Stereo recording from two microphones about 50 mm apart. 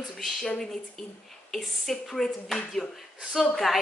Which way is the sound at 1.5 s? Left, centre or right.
Centre.